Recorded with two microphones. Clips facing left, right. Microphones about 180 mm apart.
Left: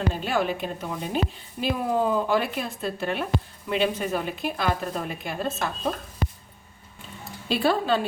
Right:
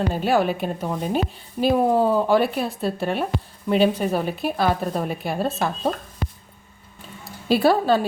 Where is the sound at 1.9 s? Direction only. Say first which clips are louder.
Right 5 dB; 35° right (ahead or behind).